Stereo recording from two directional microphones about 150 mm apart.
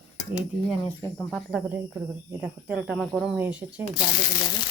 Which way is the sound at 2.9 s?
Centre (ahead or behind).